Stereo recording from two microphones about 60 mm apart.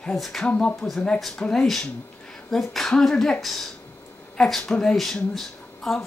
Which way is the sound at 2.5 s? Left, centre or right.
Centre.